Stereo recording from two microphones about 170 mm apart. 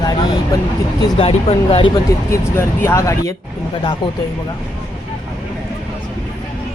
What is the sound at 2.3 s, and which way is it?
Speech, 15° left (ahead or behind).